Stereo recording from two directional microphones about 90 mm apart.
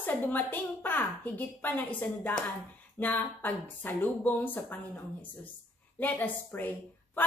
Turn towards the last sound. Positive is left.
turn(degrees=20)  # may be behind; listen again after turning